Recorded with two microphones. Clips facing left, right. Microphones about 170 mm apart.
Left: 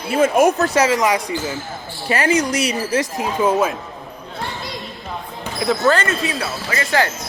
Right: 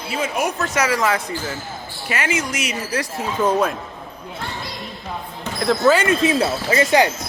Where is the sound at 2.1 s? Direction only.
35° left (ahead or behind); by 3.7 s 5° left (ahead or behind).